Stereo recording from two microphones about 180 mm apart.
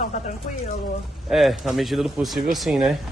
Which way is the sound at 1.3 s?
Centre (ahead or behind).